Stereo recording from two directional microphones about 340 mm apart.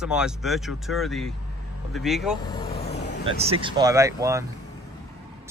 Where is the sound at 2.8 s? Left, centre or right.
Left.